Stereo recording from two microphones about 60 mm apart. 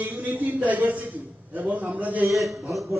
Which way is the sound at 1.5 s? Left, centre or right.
Right.